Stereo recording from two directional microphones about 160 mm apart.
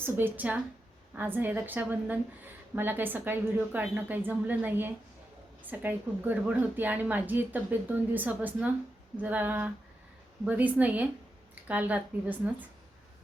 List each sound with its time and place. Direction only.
0.0 s a woman's voice: 10° right (ahead or behind)